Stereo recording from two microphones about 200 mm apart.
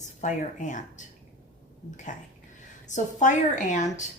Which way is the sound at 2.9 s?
40° left (ahead or behind).